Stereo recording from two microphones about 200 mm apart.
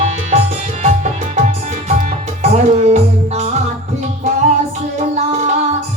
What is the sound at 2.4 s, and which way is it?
Music, 35° right (ahead or behind).